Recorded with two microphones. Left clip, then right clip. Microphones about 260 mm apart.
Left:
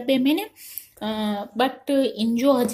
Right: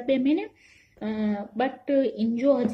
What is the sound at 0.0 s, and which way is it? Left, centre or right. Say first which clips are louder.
Speech: left 3 dB; centre.